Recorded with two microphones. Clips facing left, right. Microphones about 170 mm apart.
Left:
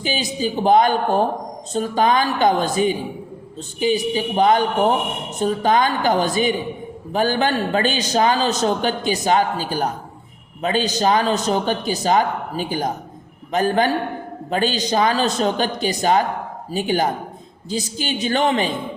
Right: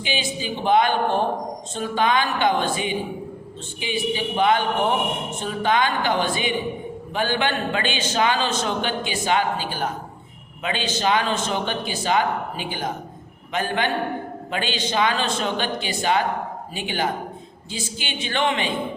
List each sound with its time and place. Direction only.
0.0 s a man's voice: 40° left (ahead or behind)